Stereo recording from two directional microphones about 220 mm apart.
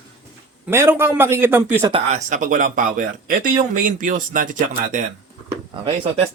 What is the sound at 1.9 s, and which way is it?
Speech, 30° right (ahead or behind).